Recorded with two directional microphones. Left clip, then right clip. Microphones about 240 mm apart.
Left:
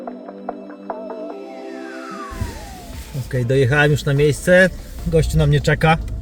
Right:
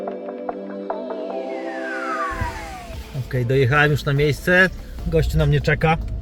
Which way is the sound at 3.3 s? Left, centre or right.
Centre.